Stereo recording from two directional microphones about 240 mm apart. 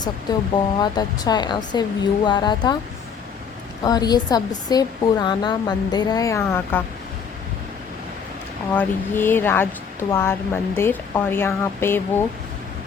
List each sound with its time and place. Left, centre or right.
0.0 s a woman's voice: centre
3.8 s a woman's voice: centre
8.7 s a woman's voice: centre